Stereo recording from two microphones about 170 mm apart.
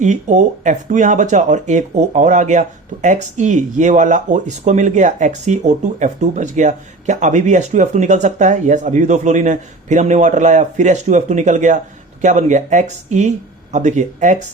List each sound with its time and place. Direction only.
0.0 s speech: 45° right (ahead or behind)